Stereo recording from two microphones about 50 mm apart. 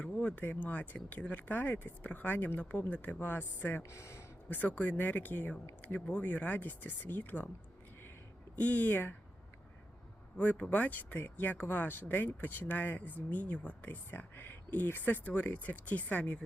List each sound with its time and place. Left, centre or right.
0.0 s speech: left
3.8 s speech: left
4.4 s speech: left
8.5 s speech: left
10.3 s speech: left